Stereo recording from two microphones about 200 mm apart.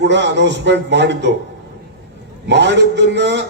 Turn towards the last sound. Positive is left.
turn(degrees=-60)  # may be behind; listen again after turning